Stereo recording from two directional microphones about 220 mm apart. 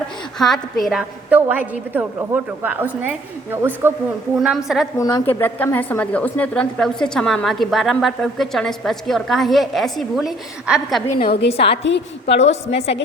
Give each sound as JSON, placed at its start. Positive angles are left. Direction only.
{"t": 0.3, "sound": "a woman's voice", "side_deg": 0}
{"t": 4.9, "sound": "a woman's voice", "side_deg": 15}
{"t": 11.5, "sound": "a woman's voice", "side_deg": 25}